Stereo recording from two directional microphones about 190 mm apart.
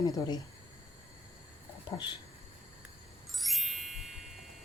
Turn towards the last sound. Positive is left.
turn(degrees=0)  # may be behind; listen again after turning